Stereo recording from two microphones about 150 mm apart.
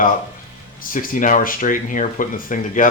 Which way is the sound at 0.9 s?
60° left (ahead or behind).